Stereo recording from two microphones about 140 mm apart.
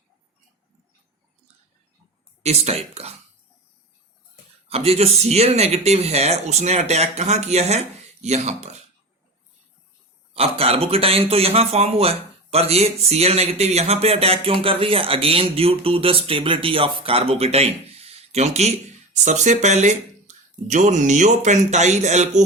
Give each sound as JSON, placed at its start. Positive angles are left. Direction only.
{"t": 2.4, "sound": "speech", "side_deg": -50}
{"t": 4.7, "sound": "speech", "side_deg": -45}
{"t": 10.3, "sound": "speech", "side_deg": -45}